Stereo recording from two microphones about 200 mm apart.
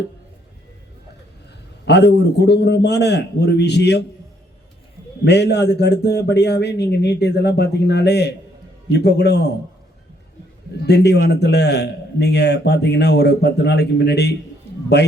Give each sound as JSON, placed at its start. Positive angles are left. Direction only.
{"t": 1.8, "sound": "a man's voice", "side_deg": 55}
{"t": 5.2, "sound": "a man's voice", "side_deg": 55}
{"t": 10.8, "sound": "a man's voice", "side_deg": 55}